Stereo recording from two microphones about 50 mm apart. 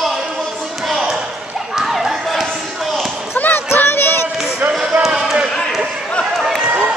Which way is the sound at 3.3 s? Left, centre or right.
Left.